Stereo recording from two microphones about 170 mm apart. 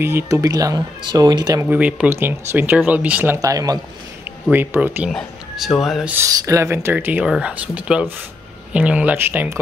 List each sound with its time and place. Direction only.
0.0 s speech: 15° right (ahead or behind)
1.7 s speech: 5° right (ahead or behind)
3.3 s speech: 20° right (ahead or behind)
4.5 s speech: 10° right (ahead or behind)
5.1 s speech: centre (ahead or behind)
6.1 s speech: 20° right (ahead or behind)